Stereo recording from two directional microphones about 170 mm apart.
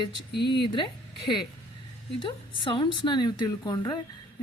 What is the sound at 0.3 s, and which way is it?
Speech, 80° left.